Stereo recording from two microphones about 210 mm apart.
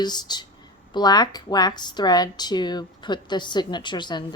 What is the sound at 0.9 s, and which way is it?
A woman's voice, 20° left (ahead or behind).